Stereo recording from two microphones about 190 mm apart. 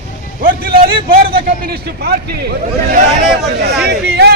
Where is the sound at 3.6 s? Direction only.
55° right (ahead or behind).